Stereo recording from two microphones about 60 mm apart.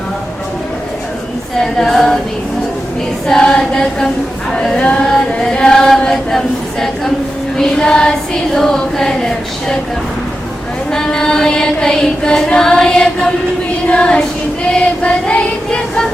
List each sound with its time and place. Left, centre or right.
1.5 s choir: centre
3.2 s choir: centre
10.9 s choir: centre